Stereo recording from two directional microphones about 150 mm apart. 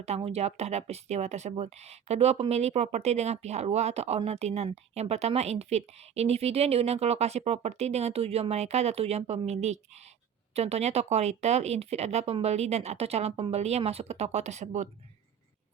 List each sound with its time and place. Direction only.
0.0 s speech: 45° right (ahead or behind)